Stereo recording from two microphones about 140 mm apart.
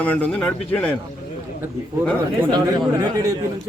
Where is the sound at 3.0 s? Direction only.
25° right (ahead or behind).